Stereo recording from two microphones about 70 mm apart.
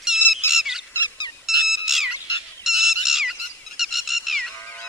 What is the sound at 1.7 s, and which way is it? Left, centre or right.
Bird, centre.